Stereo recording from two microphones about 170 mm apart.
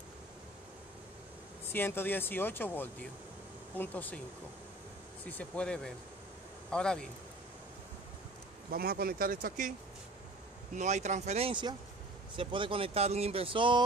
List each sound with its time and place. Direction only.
1.7 s speech: 10° left (ahead or behind)
5.2 s speech: 5° left (ahead or behind)
8.7 s speech: 60° right (ahead or behind); by 13.8 s 30° right (ahead or behind)